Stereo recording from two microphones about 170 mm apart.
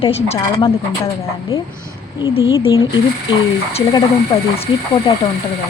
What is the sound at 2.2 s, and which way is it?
Speech, 30° left (ahead or behind).